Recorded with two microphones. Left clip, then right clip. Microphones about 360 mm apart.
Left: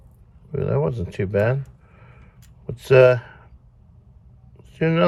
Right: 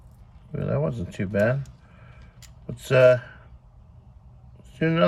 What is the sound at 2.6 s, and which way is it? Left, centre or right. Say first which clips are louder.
Speech: left 3 dB; centre.